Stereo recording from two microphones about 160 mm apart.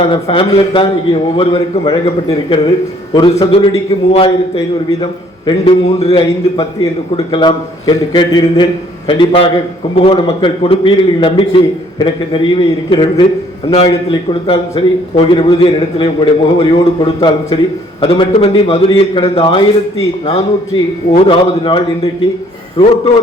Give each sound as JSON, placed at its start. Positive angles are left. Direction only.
{"t": 0.0, "sound": "a man's voice", "side_deg": 35}
{"t": 7.3, "sound": "a man's voice", "side_deg": 30}
{"t": 21.1, "sound": "a man's voice", "side_deg": 30}